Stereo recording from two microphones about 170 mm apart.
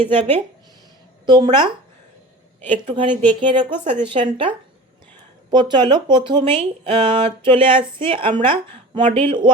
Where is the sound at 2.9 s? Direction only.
30° right (ahead or behind).